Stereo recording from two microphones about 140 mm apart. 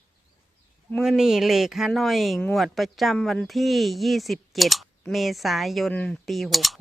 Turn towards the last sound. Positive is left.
turn(degrees=0)  # may be behind; listen again after turning